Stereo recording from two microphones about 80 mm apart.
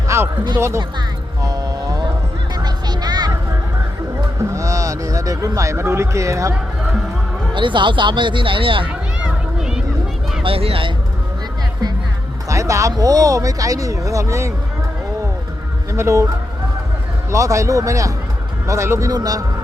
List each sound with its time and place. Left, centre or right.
0.1 s a sound: right
1.4 s music: right
4.4 s speech: right
7.5 s speech: right
8.9 s a sound: centre
10.4 s speech: right
12.5 s speech: right
15.9 s speech: right
17.3 s a man's voice: right